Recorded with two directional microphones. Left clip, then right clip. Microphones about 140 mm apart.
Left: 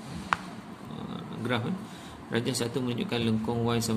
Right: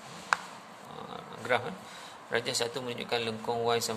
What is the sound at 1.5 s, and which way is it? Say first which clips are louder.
A man's voice: right 3 dB; 35° right (ahead or behind).